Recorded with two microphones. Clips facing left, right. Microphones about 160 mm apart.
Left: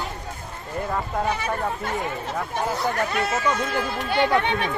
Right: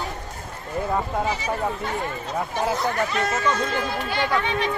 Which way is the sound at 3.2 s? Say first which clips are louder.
Even; 10° left (ahead or behind).